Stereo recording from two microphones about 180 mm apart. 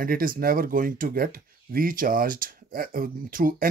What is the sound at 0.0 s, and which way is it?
Speech, 55° right (ahead or behind).